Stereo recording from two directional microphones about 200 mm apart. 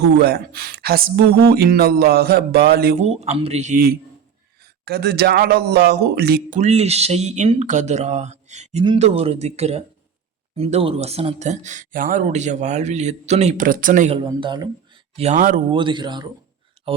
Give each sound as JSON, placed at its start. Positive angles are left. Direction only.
{"t": 0.2, "sound": "speech", "side_deg": -55}
{"t": 3.0, "sound": "speech", "side_deg": -30}
{"t": 4.6, "sound": "speech", "side_deg": -55}
{"t": 6.6, "sound": "speech", "side_deg": -35}
{"t": 14.2, "sound": "speech", "side_deg": -25}
{"t": 15.1, "sound": "speech", "side_deg": -35}
{"t": 15.7, "sound": "speech", "side_deg": -25}